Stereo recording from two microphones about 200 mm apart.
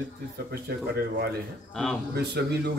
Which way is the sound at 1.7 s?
Centre (ahead or behind).